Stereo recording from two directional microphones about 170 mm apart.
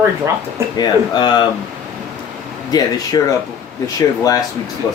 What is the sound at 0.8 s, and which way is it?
Speech, 25° left (ahead or behind).